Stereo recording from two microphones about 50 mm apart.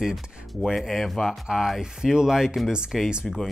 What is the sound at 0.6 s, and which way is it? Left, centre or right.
Speech, centre.